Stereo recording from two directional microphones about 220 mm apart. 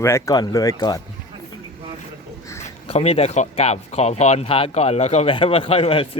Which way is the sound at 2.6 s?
30° left (ahead or behind).